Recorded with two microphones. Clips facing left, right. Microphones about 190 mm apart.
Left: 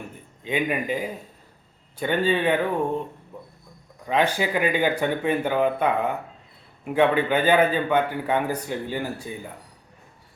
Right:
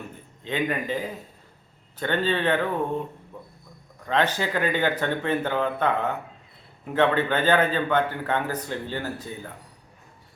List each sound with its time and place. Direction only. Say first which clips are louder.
0.4 s a man's voice: left 2 dB; 10° left (ahead or behind)
4.0 s a man's voice: left 2 dB; 10° left (ahead or behind)